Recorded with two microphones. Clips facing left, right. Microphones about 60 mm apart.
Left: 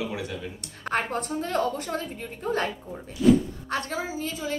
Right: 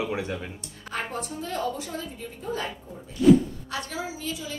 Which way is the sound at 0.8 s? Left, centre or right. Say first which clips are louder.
Left 5 dB; left.